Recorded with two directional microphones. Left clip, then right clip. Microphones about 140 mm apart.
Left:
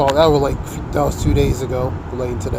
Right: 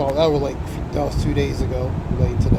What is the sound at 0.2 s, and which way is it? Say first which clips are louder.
Speech: left 5 dB; 40° left (ahead or behind).